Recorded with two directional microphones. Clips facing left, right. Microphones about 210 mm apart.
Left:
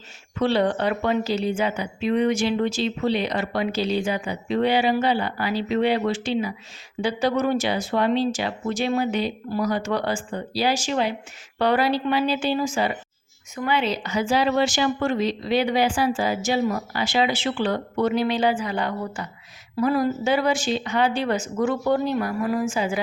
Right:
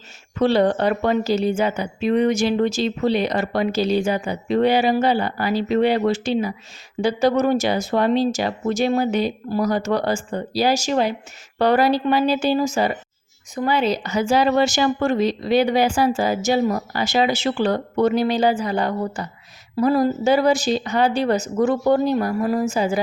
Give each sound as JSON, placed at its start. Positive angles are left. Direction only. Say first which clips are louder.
{"t": 0.3, "sound": "a woman's voice", "louder": "right 4 dB", "side_deg": -40}